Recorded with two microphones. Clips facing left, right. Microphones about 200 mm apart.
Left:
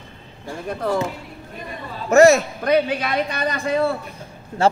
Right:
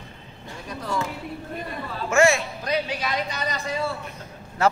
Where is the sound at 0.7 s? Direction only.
55° left (ahead or behind).